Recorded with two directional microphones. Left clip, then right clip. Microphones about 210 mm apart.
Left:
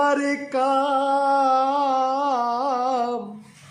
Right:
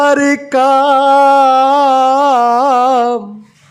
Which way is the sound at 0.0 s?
45° right (ahead or behind).